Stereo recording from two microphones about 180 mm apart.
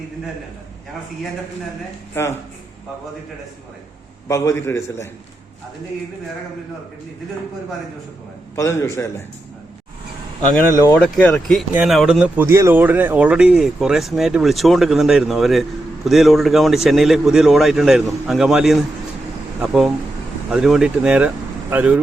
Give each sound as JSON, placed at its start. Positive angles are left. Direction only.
{"t": 2.1, "sound": "speech", "side_deg": 15}
{"t": 4.3, "sound": "speech", "side_deg": 15}
{"t": 8.5, "sound": "speech", "side_deg": 15}
{"t": 10.4, "sound": "speech", "side_deg": 10}